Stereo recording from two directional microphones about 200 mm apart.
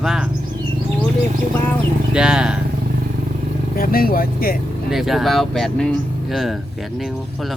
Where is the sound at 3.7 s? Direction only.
45° left (ahead or behind).